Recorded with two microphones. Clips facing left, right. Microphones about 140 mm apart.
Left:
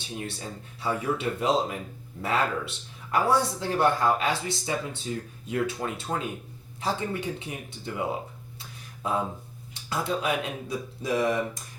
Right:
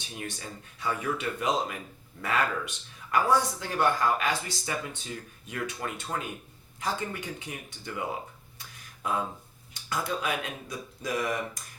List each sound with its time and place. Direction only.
0.1 s speech: 30° left (ahead or behind)
9.9 s speech: 25° left (ahead or behind)